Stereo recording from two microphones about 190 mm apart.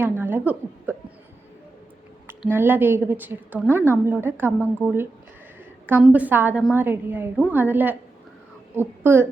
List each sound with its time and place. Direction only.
0.0 s a woman's voice: 10° right (ahead or behind)
2.2 s a woman's voice: 10° right (ahead or behind)